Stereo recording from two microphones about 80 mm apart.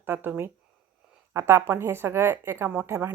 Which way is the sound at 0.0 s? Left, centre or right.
Right.